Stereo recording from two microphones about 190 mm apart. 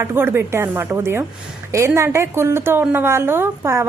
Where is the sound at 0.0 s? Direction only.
10° right (ahead or behind).